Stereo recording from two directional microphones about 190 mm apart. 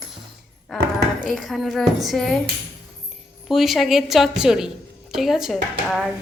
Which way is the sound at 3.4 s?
Centre (ahead or behind).